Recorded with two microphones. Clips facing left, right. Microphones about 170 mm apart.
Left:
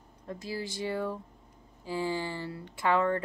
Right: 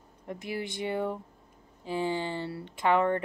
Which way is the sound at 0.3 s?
20° right (ahead or behind).